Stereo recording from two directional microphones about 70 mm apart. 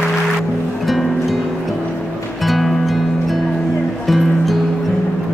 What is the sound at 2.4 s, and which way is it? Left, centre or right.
Music, centre.